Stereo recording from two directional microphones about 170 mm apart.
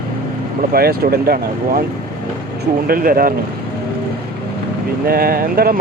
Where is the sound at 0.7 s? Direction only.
60° right (ahead or behind).